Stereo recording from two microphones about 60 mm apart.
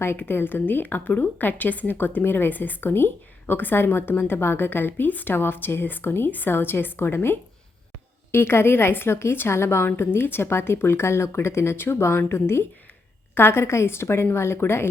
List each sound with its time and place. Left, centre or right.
0.0 s a woman's voice: left